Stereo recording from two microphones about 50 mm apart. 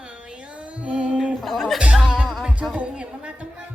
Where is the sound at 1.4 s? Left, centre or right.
Centre.